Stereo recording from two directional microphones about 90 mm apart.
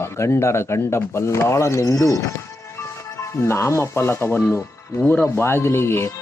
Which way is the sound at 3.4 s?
30° left (ahead or behind).